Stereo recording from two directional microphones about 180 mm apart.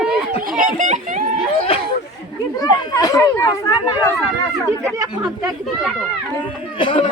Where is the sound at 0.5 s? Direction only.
45° right (ahead or behind).